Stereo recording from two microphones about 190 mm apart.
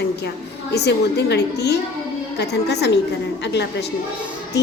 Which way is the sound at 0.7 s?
60° left (ahead or behind).